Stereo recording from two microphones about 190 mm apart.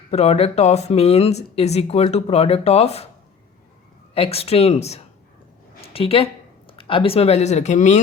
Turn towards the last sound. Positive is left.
turn(degrees=40)  # may be behind; listen again after turning